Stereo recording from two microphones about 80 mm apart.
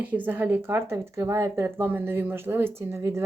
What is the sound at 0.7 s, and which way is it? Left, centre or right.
Speech, right.